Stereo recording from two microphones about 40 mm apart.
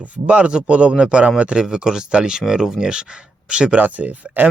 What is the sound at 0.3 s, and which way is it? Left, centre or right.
Speech, right.